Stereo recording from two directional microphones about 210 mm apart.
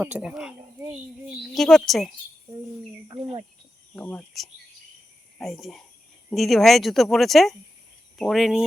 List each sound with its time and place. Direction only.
0.0 s a woman's voice: 5° right (ahead or behind)
3.9 s a woman's voice: 10° left (ahead or behind)